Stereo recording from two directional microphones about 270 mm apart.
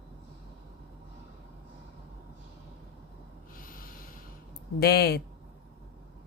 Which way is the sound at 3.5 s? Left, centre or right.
Left.